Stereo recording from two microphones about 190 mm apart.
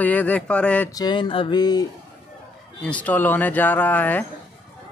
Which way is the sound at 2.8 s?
5° left (ahead or behind).